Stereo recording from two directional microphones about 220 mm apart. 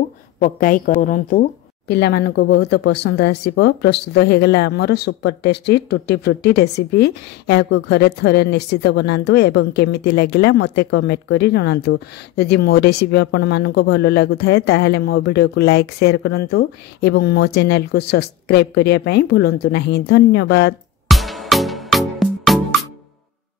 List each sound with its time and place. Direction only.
0.4 s a woman's voice: 40° left (ahead or behind)
21.1 s music: centre (ahead or behind)